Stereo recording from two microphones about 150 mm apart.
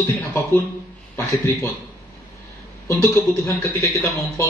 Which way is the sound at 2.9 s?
15° left (ahead or behind).